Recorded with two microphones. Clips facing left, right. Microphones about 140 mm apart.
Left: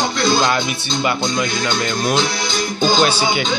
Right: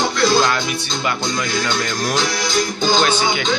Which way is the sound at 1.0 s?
20° left (ahead or behind).